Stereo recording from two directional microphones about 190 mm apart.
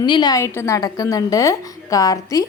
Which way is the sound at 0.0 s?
25° left (ahead or behind).